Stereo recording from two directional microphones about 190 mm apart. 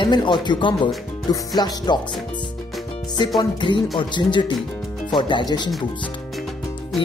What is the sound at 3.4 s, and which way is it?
Speech, 25° left (ahead or behind).